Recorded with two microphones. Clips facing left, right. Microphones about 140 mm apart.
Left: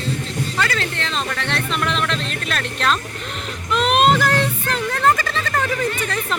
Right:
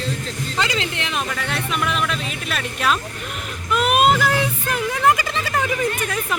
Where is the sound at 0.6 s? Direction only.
15° right (ahead or behind).